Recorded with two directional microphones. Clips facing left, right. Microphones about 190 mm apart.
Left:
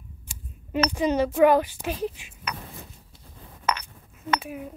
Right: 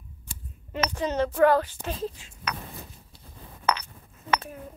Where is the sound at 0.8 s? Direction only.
10° left (ahead or behind).